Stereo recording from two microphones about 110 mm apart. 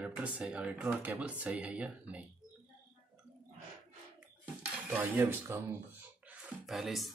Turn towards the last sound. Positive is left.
turn(degrees=0)  # may be behind; listen again after turning